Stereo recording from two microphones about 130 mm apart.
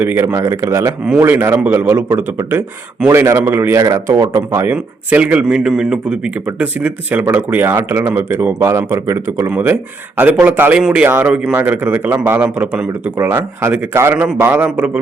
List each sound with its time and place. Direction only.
0.0 s a man's voice: 15° right (ahead or behind)
4.7 s a man's voice: 10° right (ahead or behind)
13.1 s a man's voice: 20° right (ahead or behind)